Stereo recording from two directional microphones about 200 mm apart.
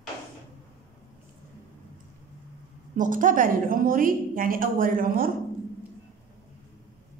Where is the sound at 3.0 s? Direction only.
40° right (ahead or behind).